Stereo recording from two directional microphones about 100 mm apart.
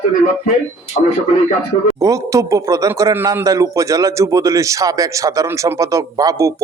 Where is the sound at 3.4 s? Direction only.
35° right (ahead or behind).